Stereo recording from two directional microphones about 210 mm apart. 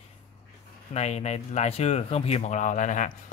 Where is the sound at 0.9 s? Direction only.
30° left (ahead or behind).